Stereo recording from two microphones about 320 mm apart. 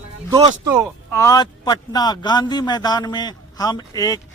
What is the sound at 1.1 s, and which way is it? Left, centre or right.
A man's voice, centre.